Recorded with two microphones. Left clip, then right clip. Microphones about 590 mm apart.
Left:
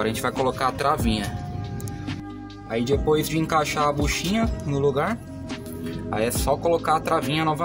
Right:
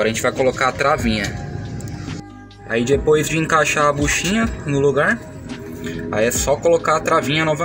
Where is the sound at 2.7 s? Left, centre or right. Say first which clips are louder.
Right 6 dB; left.